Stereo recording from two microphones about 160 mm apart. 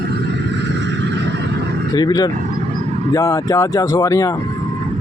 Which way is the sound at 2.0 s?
25° left (ahead or behind).